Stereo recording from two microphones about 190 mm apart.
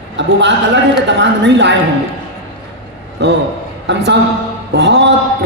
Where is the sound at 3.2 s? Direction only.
65° right (ahead or behind).